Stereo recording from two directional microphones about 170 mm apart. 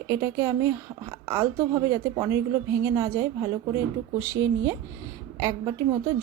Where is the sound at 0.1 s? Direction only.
15° right (ahead or behind).